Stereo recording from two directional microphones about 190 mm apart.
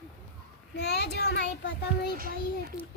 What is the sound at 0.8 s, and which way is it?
Child singing, 60° left (ahead or behind).